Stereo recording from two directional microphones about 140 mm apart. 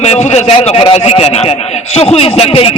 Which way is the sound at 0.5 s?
40° left (ahead or behind).